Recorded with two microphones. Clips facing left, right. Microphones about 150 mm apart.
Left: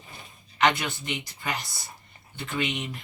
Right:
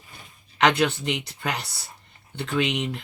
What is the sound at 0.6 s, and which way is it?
Speech, 70° right (ahead or behind).